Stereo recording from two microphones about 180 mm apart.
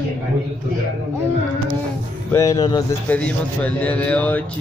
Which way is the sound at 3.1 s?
10° left (ahead or behind).